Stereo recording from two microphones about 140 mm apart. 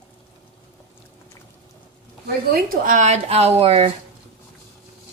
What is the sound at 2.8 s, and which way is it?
Speech, 65° right (ahead or behind).